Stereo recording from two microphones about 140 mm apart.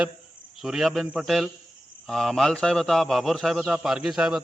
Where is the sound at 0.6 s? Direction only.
5° right (ahead or behind).